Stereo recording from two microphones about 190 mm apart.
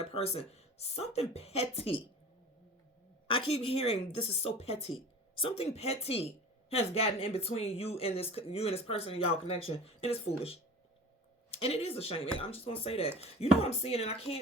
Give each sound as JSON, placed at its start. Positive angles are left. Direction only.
{"t": 0.0, "sound": "speech", "side_deg": 30}
{"t": 3.2, "sound": "speech", "side_deg": 30}